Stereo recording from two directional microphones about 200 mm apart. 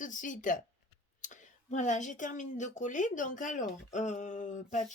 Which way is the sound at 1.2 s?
40° left (ahead or behind).